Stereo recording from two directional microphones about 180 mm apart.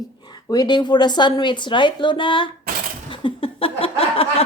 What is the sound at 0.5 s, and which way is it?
A woman's voice, 25° left (ahead or behind).